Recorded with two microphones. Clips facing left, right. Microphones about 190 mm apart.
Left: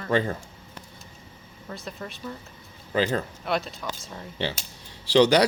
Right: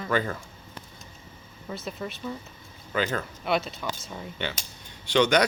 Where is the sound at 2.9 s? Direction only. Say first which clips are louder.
Left 3 dB; 30° left (ahead or behind).